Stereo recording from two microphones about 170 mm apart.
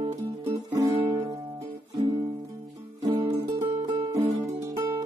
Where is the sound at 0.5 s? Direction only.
20° right (ahead or behind).